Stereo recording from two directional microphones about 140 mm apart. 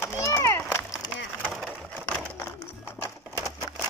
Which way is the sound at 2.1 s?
15° left (ahead or behind).